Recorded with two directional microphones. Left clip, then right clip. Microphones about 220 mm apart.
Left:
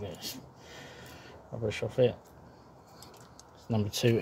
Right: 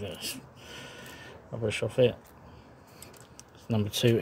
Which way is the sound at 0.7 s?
15° right (ahead or behind).